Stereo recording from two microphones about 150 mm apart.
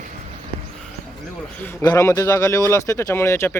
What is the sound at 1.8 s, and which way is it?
Speech, 25° left (ahead or behind).